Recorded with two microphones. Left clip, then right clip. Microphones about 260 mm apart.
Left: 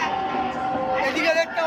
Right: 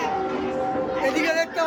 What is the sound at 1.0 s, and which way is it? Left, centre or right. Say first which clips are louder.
Speech: even; centre.